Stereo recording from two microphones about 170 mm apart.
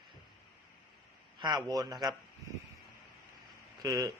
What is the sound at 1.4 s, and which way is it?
Speech, 25° right (ahead or behind).